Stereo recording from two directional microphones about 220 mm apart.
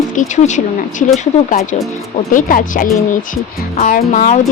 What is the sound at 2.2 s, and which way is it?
A woman's voice, 35° left (ahead or behind).